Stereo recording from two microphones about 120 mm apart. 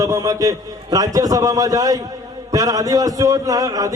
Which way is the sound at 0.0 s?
30° right (ahead or behind).